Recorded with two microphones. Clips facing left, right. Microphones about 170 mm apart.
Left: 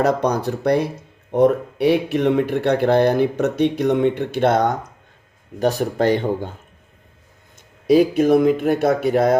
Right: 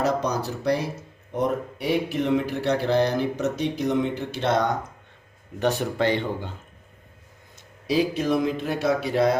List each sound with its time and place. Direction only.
0.0 s speech: 60° left (ahead or behind)
5.5 s speech: 40° left (ahead or behind)
7.9 s speech: 50° left (ahead or behind)